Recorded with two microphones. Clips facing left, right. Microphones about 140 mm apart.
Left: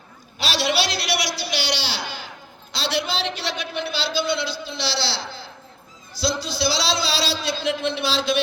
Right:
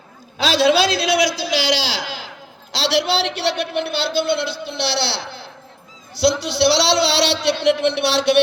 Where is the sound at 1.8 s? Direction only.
90° right.